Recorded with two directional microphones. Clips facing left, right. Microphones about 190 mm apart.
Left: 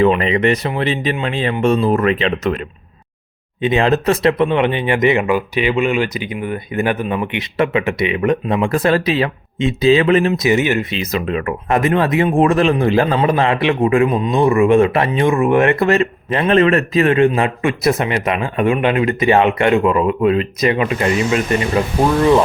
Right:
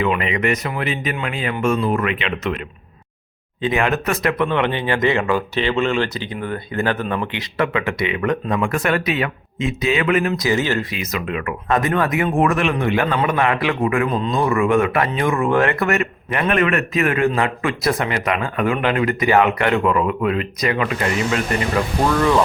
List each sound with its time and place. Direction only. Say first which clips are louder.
0.0 s speech: left 6 dB; 35° left (ahead or behind)
3.6 s speech: left 4 dB; 25° left (ahead or behind)
11.0 s speech: left 5 dB; 30° left (ahead or behind)
14.1 s speech: left 3 dB; 10° left (ahead or behind)
14.3 s speech: left 6 dB; 25° left (ahead or behind)